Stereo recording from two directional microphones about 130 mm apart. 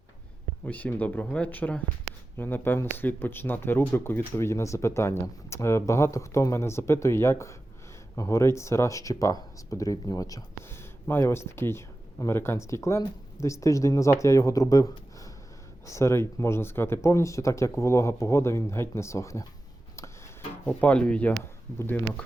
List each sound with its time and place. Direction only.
0.6 s speech: 10° left (ahead or behind)
20.7 s speech: 10° left (ahead or behind)